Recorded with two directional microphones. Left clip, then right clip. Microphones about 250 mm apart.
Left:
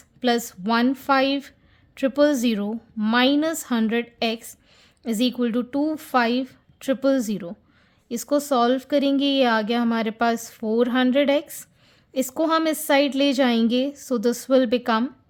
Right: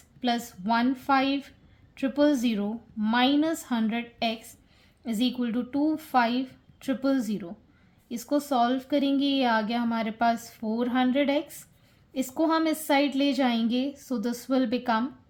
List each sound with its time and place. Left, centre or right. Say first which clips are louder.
0.2 s a woman's voice: left 6 dB; left